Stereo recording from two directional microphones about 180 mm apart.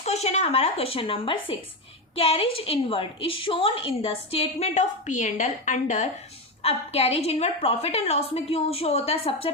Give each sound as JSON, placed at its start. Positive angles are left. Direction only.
{"t": 0.0, "sound": "a woman's voice", "side_deg": 35}